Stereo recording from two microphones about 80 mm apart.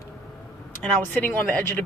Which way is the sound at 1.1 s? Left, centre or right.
Left.